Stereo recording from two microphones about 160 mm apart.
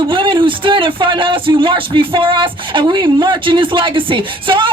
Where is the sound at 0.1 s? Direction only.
30° right (ahead or behind).